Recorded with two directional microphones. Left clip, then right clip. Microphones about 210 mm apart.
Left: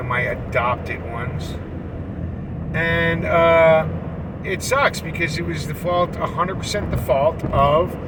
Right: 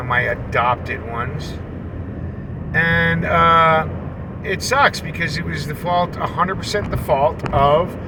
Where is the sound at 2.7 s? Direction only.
20° right (ahead or behind).